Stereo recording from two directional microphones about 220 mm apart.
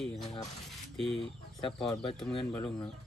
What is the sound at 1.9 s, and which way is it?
Speech, 20° left (ahead or behind).